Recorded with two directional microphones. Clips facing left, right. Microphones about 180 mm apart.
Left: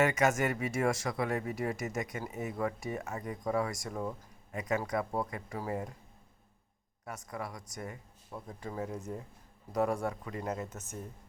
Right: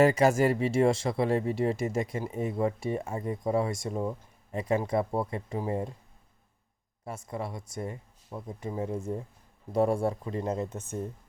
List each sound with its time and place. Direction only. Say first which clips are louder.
0.0 s speech: right 6 dB; 35° right (ahead or behind)
7.0 s speech: right 5 dB; 30° right (ahead or behind)